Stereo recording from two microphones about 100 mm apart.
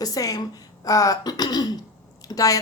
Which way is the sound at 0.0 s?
35° left (ahead or behind).